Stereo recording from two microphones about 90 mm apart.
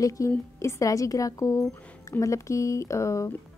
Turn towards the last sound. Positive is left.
turn(degrees=35)  # may be behind; listen again after turning